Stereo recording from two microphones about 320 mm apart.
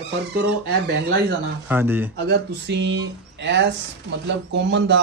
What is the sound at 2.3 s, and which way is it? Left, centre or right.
Speech, right.